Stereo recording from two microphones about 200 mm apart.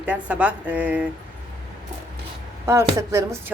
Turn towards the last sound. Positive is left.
turn(degrees=-15)  # may be behind; listen again after turning